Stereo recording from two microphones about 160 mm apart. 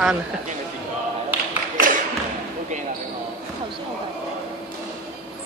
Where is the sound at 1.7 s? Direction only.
60° right (ahead or behind).